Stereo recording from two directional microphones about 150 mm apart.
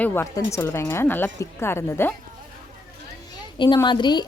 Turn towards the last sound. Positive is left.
turn(degrees=30)  # may be behind; listen again after turning